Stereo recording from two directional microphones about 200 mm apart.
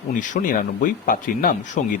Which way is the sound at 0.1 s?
40° left (ahead or behind).